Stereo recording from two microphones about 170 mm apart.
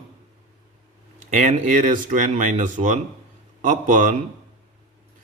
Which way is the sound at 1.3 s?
45° right (ahead or behind).